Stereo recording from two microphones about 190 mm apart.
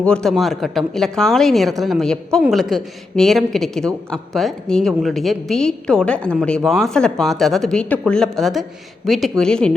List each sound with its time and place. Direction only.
0.0 s speech: 5° left (ahead or behind)